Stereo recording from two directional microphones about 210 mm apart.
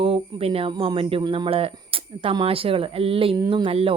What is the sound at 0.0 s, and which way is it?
Speech, 25° right (ahead or behind).